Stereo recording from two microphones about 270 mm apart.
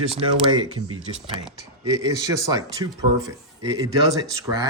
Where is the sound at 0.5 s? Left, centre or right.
Centre.